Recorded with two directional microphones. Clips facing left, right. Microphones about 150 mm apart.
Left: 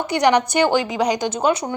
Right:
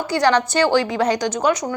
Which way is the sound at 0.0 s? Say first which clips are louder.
Left 1 dB; 20° left (ahead or behind).